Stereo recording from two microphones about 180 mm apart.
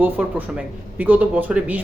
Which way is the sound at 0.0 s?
10° right (ahead or behind).